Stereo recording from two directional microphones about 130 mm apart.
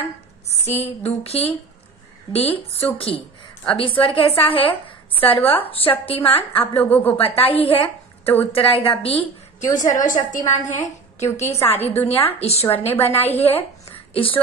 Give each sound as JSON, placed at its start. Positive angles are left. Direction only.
{"t": 0.7, "sound": "a woman's voice", "side_deg": 55}
{"t": 6.8, "sound": "speech", "side_deg": 15}
{"t": 7.2, "sound": "a woman's voice", "side_deg": 45}
{"t": 9.8, "sound": "a woman's voice", "side_deg": 80}